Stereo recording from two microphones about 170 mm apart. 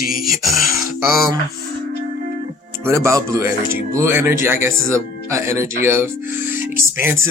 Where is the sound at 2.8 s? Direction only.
15° right (ahead or behind).